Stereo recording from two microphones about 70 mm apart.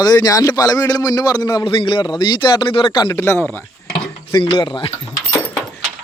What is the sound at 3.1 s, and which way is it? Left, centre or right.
Speech, left.